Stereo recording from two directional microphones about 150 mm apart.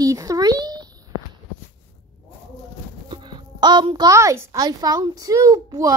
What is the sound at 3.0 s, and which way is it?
A child's voice, 30° right (ahead or behind).